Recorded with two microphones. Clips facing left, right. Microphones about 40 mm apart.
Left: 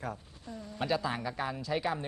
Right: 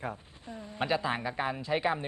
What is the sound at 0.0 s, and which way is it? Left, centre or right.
A man's voice, right.